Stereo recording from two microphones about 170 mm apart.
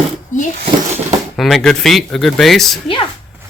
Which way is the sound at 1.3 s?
Centre (ahead or behind).